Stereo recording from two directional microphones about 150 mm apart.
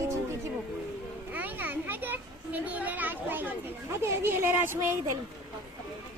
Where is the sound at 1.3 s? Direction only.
10° right (ahead or behind).